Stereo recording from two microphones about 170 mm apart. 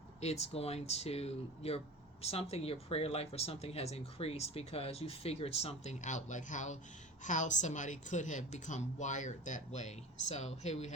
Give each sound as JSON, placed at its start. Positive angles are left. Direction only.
{"t": 0.2, "sound": "a woman's voice", "side_deg": 40}